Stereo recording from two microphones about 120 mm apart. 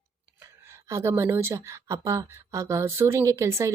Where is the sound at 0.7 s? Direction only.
25° right (ahead or behind).